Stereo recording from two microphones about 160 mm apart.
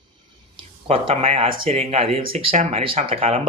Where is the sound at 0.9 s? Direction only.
35° right (ahead or behind).